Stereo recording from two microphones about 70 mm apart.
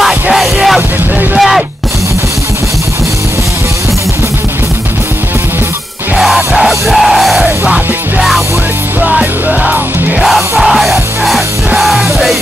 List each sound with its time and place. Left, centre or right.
0.0 s music: centre
6.1 s music: centre
7.4 s music: centre
9.0 s music: centre
10.2 s music: centre